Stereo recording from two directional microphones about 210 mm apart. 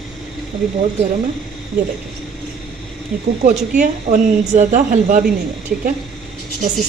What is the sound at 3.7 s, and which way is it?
A woman's voice, 40° right (ahead or behind).